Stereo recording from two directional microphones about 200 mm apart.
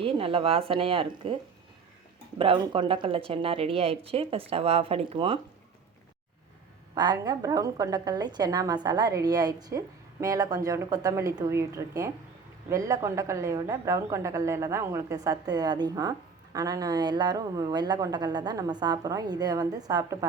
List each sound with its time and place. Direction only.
0.0 s a woman's voice: 25° right (ahead or behind)
2.4 s a woman's voice: 25° right (ahead or behind)
6.9 s a woman's voice: 20° right (ahead or behind)